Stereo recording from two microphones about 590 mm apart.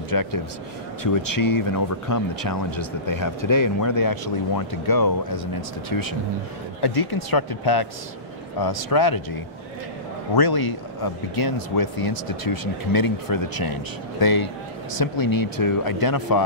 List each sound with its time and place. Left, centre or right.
0.1 s speech: left
6.8 s speech: left